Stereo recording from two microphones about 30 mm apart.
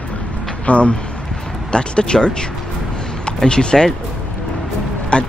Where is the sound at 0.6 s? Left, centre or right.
Left.